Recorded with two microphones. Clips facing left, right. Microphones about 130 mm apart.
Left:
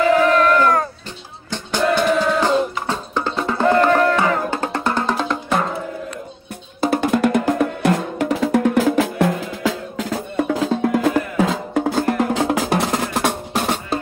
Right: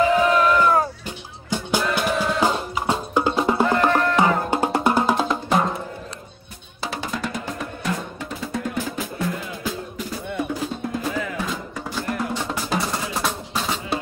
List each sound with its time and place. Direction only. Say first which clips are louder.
0.2 s a sound: left 3 dB; 10° right (ahead or behind)
1.5 s music: left 4 dB; 10° right (ahead or behind)
6.8 s music: left 11 dB; 55° left (ahead or behind)
10.3 s music: left 7 dB; 80° left; by 12.1 s 60° left (ahead or behind)
12.1 s music: left 8 dB; 75° left (ahead or behind); by 13.9 s 55° left (ahead or behind)